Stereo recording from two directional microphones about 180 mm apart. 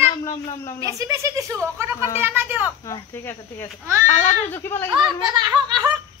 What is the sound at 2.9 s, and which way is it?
A man's voice, 15° left (ahead or behind).